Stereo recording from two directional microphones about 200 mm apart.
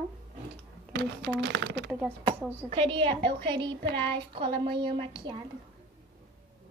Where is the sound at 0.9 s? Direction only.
60° right (ahead or behind).